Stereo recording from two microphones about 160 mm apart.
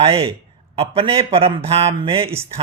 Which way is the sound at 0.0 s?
35° right (ahead or behind).